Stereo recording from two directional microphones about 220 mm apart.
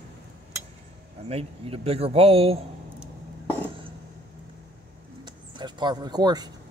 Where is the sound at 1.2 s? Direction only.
25° right (ahead or behind).